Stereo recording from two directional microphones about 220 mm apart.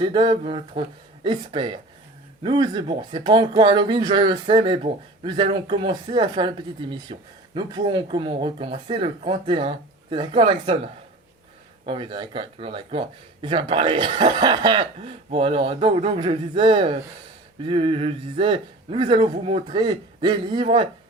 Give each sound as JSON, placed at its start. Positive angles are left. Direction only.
{"t": 0.0, "sound": "speech", "side_deg": -20}
{"t": 11.9, "sound": "speech", "side_deg": -20}